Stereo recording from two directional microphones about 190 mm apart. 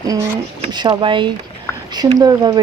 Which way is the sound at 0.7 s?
25° right (ahead or behind).